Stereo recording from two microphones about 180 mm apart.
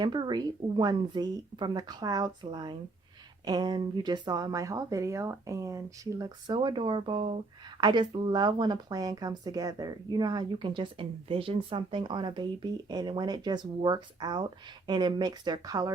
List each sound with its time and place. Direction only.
0.0 s speech: 25° right (ahead or behind)